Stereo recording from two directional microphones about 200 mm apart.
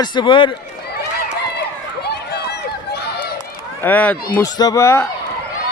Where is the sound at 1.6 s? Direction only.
55° left (ahead or behind).